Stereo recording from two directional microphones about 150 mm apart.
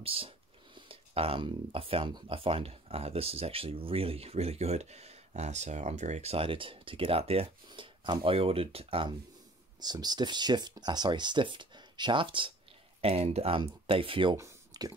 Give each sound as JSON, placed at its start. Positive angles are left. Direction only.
{"t": 0.0, "sound": "speech", "side_deg": -40}
{"t": 9.8, "sound": "speech", "side_deg": -25}
{"t": 14.3, "sound": "a sound", "side_deg": -20}